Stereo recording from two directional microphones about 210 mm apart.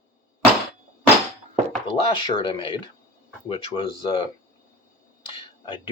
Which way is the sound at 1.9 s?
25° left (ahead or behind).